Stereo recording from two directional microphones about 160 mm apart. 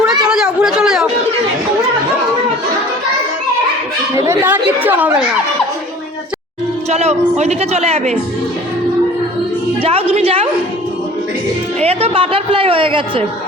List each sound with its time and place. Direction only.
0.3 s chatter: 5° right (ahead or behind)
4.3 s chatter: 10° right (ahead or behind)
6.9 s speech: 40° right (ahead or behind)
9.8 s a woman's voice: 40° right (ahead or behind)
11.8 s a woman's voice: 40° right (ahead or behind)